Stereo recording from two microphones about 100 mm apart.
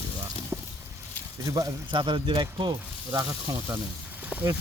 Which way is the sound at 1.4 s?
35° right (ahead or behind).